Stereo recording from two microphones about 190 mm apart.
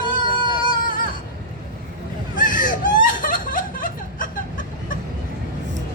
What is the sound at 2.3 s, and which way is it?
Laughter, 45° left (ahead or behind).